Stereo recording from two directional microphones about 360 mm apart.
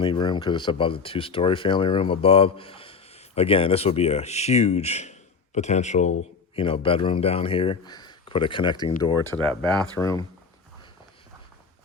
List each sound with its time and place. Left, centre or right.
0.0 s speech: centre
9.3 s speech: centre